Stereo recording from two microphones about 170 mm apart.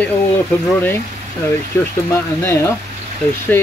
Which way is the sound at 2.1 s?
15° left (ahead or behind).